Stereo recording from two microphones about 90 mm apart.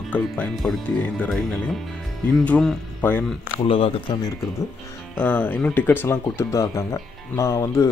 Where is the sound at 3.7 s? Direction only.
75° left (ahead or behind).